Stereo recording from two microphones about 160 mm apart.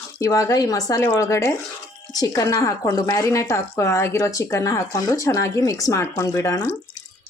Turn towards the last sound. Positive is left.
turn(degrees=15)  # may be behind; listen again after turning